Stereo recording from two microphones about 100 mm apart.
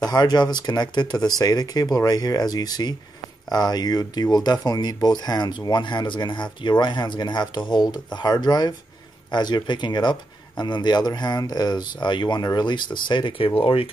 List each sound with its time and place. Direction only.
0.0 s speech: 45° left (ahead or behind)
13.6 s speech: 65° left (ahead or behind)